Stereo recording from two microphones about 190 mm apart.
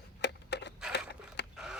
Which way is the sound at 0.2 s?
65° left (ahead or behind).